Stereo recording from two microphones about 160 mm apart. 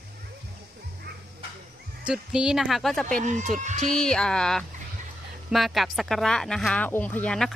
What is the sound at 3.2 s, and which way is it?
Speech, 50° right (ahead or behind).